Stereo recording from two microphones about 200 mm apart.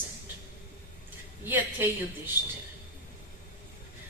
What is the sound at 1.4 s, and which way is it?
Speech, 10° right (ahead or behind).